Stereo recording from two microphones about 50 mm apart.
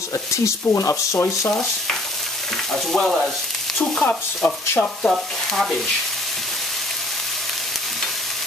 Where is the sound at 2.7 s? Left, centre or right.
Centre.